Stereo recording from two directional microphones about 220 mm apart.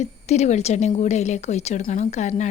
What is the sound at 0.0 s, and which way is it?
Speech, 30° left (ahead or behind).